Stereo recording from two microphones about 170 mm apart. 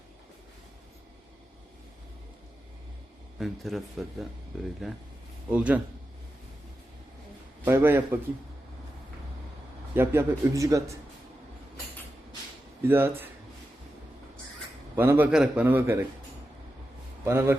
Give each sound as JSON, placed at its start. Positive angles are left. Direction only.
{"t": 3.3, "sound": "a man's voice", "side_deg": 0}
{"t": 7.6, "sound": "a man's voice", "side_deg": -10}
{"t": 9.9, "sound": "a man's voice", "side_deg": -15}
{"t": 12.8, "sound": "a man's voice", "side_deg": -15}
{"t": 14.9, "sound": "a man's voice", "side_deg": -15}
{"t": 17.2, "sound": "a man's voice", "side_deg": -15}